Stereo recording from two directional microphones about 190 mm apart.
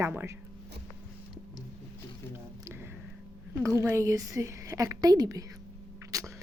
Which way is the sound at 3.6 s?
15° right (ahead or behind).